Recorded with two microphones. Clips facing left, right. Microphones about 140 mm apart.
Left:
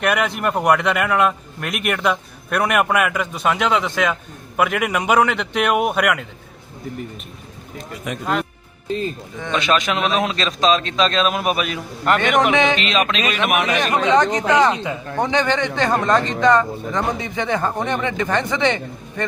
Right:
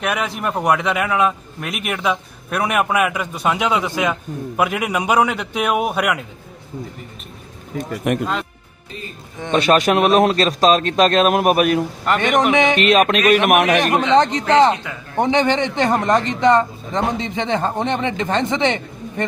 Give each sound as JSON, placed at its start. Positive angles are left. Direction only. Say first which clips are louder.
{"t": 0.0, "sound": "a man's voice", "louder": "left 2 dB", "side_deg": 0}
{"t": 8.1, "sound": "speech", "louder": "right 9 dB", "side_deg": -60}
{"t": 9.5, "sound": "a man's voice", "louder": "right 5 dB", "side_deg": -50}
{"t": 12.3, "sound": "a man's voice", "louder": "right 2 dB", "side_deg": 0}
{"t": 12.7, "sound": "a man's voice", "louder": "right 6 dB", "side_deg": -50}
{"t": 14.0, "sound": "speech", "louder": "right 1 dB", "side_deg": -25}